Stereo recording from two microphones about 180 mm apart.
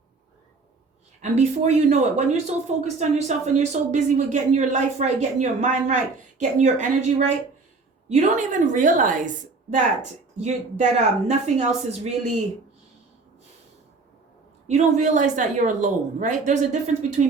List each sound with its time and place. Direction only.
1.2 s a woman's voice: 40° right (ahead or behind)
14.7 s a woman's voice: 40° right (ahead or behind)